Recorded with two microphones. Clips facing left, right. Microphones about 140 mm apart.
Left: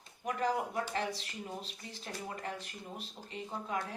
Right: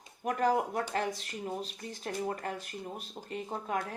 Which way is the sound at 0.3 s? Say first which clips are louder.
Right 5 dB; 50° right (ahead or behind).